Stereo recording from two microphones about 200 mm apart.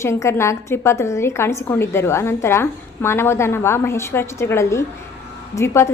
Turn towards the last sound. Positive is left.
turn(degrees=15)  # may be behind; listen again after turning